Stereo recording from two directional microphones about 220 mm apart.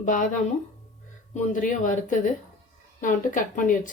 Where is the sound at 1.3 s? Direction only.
35° left (ahead or behind).